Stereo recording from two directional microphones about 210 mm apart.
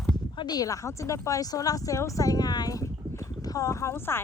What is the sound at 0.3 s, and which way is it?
A woman's voice, 20° left (ahead or behind).